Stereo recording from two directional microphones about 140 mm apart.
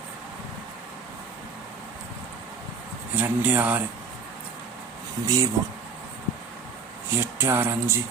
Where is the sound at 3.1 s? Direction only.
10° right (ahead or behind).